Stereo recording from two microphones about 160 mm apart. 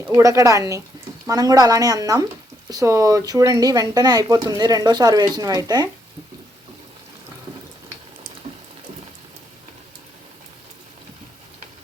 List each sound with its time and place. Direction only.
0.1 s speech: 20° right (ahead or behind)